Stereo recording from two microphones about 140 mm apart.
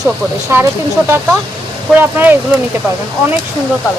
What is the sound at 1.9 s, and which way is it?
Speech, 15° right (ahead or behind).